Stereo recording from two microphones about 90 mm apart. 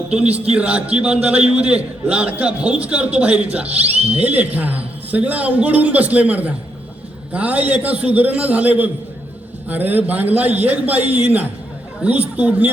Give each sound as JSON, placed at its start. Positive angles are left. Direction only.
{"t": 0.1, "sound": "a man's voice", "side_deg": -10}